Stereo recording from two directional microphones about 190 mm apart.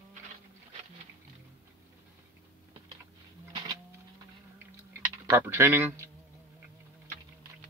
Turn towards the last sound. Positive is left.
turn(degrees=-10)  # may be behind; listen again after turning